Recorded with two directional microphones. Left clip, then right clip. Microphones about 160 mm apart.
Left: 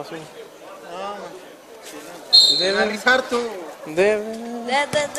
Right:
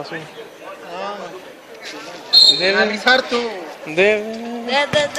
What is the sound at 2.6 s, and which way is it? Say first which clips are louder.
Speech: right 4 dB; 15° left (ahead or behind).